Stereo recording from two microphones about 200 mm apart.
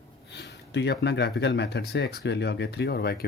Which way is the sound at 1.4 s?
60° left (ahead or behind).